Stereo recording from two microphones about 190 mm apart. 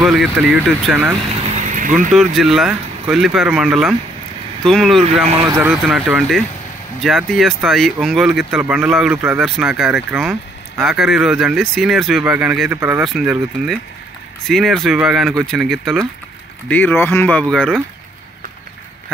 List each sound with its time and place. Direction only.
0.0 s speech: centre (ahead or behind)
1.8 s speech: 45° right (ahead or behind)
2.1 s speech: centre (ahead or behind)
5.0 s speech: 30° right (ahead or behind)
5.4 s speech: 10° right (ahead or behind); by 17.7 s 5° left (ahead or behind)